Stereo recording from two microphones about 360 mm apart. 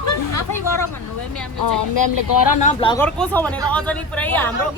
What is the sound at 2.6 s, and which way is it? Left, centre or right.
Speech, centre.